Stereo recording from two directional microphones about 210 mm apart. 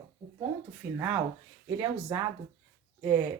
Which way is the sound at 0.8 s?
35° right (ahead or behind).